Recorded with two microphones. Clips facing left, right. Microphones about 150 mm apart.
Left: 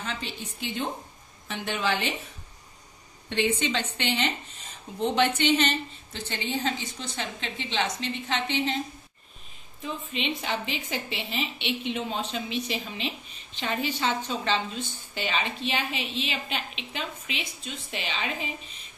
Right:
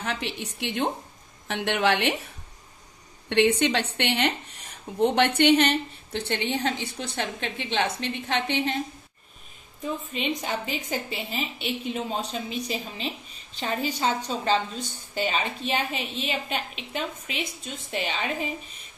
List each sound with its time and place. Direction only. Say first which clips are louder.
0.0 s a woman's voice: right 4 dB; 75° right (ahead or behind)
3.3 s a woman's voice: right 5 dB; 70° right (ahead or behind)
9.8 s a woman's voice: right 2 dB; 45° right (ahead or behind)